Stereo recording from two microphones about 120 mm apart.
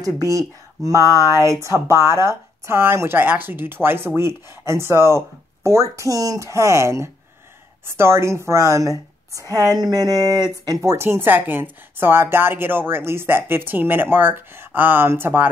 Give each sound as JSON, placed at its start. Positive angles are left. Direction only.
{"t": 0.0, "sound": "a woman's voice", "side_deg": -30}